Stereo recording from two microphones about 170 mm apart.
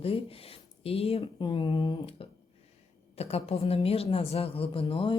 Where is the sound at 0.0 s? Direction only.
35° left (ahead or behind).